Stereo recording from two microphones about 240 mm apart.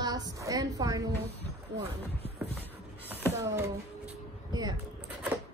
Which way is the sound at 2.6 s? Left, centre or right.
Centre.